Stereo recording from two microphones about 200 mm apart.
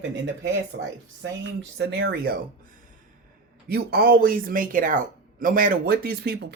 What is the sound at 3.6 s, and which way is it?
Speech, 50° right (ahead or behind).